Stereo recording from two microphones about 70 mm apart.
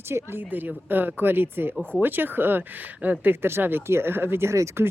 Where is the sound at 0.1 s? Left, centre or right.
Right.